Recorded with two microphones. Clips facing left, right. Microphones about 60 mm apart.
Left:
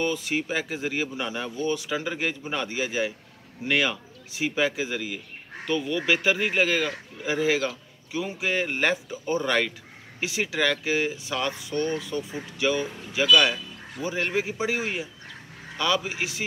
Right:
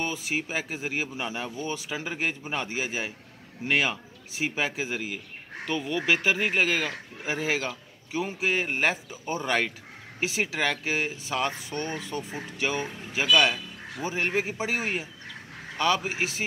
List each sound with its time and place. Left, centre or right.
0.0 s a man's voice: right